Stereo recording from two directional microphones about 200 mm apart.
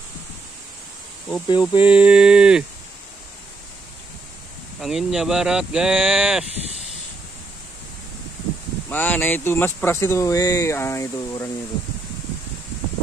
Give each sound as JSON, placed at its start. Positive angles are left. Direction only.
{"t": 1.3, "sound": "speech", "side_deg": 20}
{"t": 1.8, "sound": "speech", "side_deg": -5}
{"t": 4.7, "sound": "speech", "side_deg": 0}
{"t": 8.9, "sound": "speech", "side_deg": 10}